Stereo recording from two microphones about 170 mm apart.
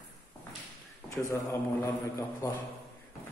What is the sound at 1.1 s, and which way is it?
A man's voice, 15° left (ahead or behind).